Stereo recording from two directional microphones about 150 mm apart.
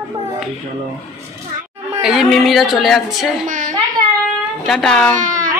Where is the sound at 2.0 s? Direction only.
5° right (ahead or behind).